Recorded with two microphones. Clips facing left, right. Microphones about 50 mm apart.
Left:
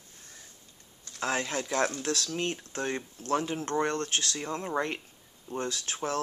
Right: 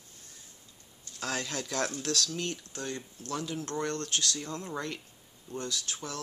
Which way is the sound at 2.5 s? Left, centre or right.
Left.